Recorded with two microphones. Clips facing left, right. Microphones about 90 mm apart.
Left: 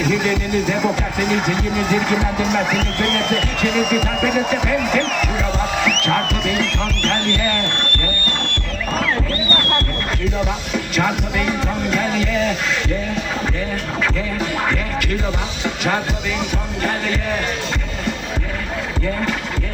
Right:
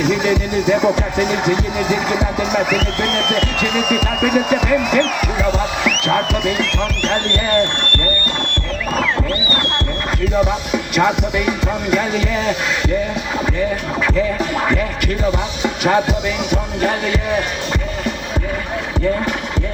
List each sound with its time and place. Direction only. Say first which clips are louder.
0.0 s speech: right 2 dB; 15° right (ahead or behind)
4.2 s speech: right 3 dB; 15° right (ahead or behind)
10.7 s speech: right 4 dB; 15° right (ahead or behind)
15.3 s speech: right 4 dB; 15° right (ahead or behind)